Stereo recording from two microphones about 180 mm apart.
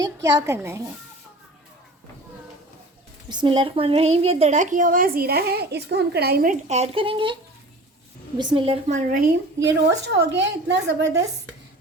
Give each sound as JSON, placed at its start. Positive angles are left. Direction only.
{"t": 0.0, "sound": "a woman's voice", "side_deg": -20}
{"t": 3.2, "sound": "a woman's voice", "side_deg": -25}
{"t": 8.4, "sound": "a woman's voice", "side_deg": -30}
{"t": 9.0, "sound": "a woman's voice", "side_deg": -55}